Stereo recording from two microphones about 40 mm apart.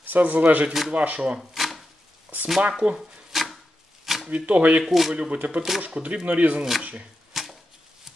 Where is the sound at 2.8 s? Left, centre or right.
Right.